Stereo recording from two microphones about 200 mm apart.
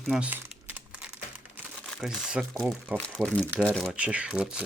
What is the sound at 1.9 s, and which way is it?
Speech, centre (ahead or behind).